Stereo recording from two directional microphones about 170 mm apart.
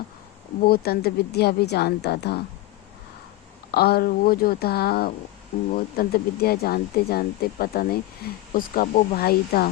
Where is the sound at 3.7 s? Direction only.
65° left (ahead or behind).